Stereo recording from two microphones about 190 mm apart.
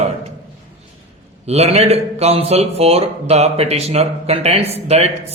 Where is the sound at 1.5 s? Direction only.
35° right (ahead or behind).